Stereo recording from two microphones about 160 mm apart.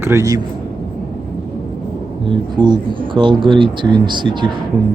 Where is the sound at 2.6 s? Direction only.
25° right (ahead or behind).